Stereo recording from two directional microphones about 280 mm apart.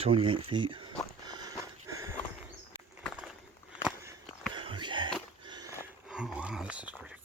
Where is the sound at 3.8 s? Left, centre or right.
Centre.